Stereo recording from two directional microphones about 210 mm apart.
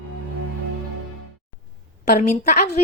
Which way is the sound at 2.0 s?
35° left (ahead or behind).